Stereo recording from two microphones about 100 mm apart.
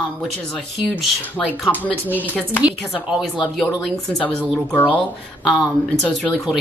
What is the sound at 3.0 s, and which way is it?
Singing, 5° right (ahead or behind).